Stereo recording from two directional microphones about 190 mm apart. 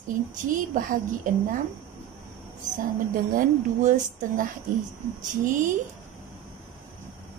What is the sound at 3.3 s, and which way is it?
Speech, 45° right (ahead or behind).